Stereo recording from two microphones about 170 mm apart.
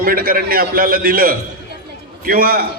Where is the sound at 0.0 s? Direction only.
60° right (ahead or behind).